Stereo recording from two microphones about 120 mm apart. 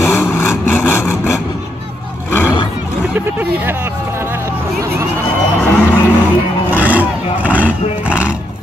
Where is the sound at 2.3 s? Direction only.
20° left (ahead or behind).